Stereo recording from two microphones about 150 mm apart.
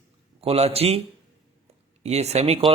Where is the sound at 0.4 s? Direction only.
45° right (ahead or behind).